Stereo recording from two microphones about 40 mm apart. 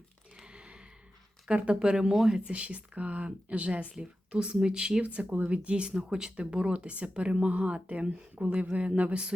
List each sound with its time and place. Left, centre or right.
0.4 s gasp: right
1.5 s speech: right
1.8 s speech: right
4.3 s speech: right
5.0 s speech: right